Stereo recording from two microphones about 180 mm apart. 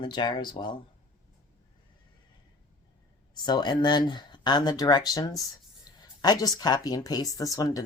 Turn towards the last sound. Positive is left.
turn(degrees=20)  # may be behind; listen again after turning